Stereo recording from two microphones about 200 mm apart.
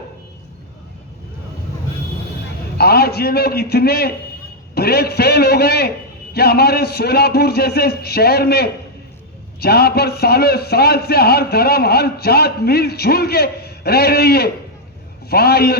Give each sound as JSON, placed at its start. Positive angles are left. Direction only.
{"t": 2.7, "sound": "a man's voice", "side_deg": 50}